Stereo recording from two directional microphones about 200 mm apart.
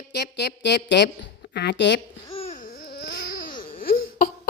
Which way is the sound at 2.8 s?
55° left (ahead or behind).